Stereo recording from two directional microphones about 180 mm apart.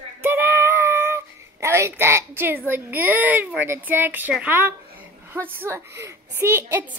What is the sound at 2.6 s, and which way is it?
A woman's voice, 10° right (ahead or behind).